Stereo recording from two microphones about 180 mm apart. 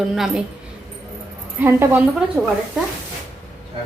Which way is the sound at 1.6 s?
15° right (ahead or behind).